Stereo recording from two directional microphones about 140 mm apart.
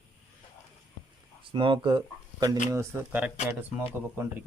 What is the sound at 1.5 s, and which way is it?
Speech, 35° right (ahead or behind).